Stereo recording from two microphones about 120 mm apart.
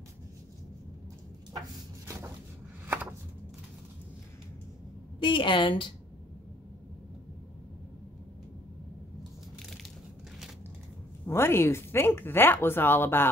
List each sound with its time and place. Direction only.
2.9 s chopping: 15° right (ahead or behind)
5.2 s a woman's voice: 45° left (ahead or behind)
11.2 s speech: 20° left (ahead or behind)